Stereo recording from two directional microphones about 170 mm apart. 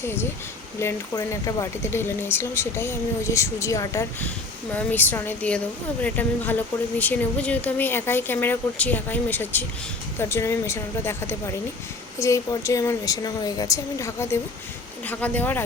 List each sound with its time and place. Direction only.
0.0 s a woman's voice: 15° left (ahead or behind)